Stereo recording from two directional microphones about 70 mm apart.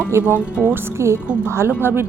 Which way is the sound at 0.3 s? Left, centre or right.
Left.